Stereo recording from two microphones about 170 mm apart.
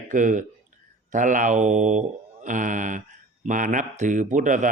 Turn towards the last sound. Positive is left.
turn(degrees=-50)  # may be behind; listen again after turning